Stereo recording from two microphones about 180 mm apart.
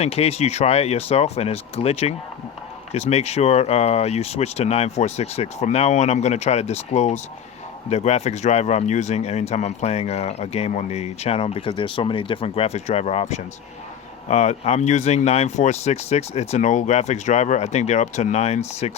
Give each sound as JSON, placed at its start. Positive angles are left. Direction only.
{"t": 0.0, "sound": "speech", "side_deg": 35}